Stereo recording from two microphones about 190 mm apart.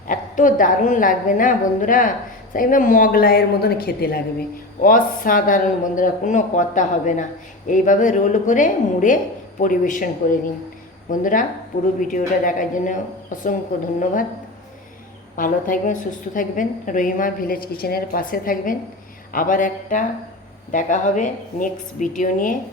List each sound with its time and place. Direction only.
0.1 s a woman's voice: 45° left (ahead or behind)
15.4 s a woman's voice: 45° left (ahead or behind)